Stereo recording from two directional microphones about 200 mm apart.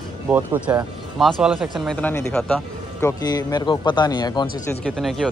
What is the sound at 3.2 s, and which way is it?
Speech, 20° left (ahead or behind).